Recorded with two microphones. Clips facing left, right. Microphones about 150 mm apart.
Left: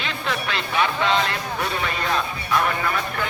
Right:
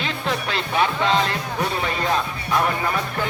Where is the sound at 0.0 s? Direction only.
35° right (ahead or behind).